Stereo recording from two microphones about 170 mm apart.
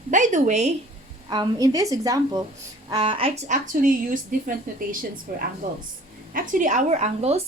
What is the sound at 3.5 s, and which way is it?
Speech, 50° right (ahead or behind).